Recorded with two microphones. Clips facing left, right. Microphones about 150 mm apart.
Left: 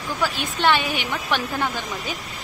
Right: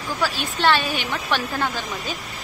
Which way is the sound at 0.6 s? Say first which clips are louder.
Even; 15° left (ahead or behind).